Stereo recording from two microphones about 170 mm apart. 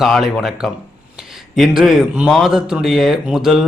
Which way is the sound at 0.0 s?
Centre (ahead or behind).